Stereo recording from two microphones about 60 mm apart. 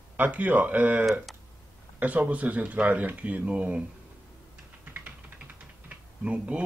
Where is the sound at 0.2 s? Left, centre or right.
Right.